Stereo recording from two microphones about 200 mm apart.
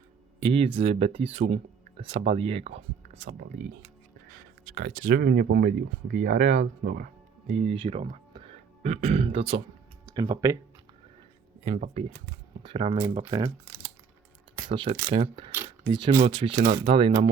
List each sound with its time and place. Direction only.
0.3 s speech: 30° right (ahead or behind)
4.7 s speech: 45° right (ahead or behind); by 9.6 s 30° right (ahead or behind)
10.2 s speech: 15° right (ahead or behind)
11.6 s speech: 30° right (ahead or behind)
14.7 s speech: 25° right (ahead or behind)